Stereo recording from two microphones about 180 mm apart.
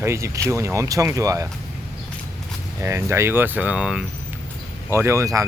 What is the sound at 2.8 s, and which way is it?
Speech, 15° right (ahead or behind).